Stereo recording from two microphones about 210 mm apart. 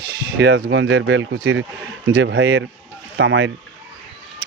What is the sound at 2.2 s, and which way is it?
Speech, 60° right (ahead or behind).